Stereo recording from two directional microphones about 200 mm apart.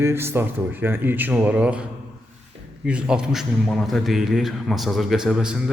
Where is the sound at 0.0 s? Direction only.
10° right (ahead or behind).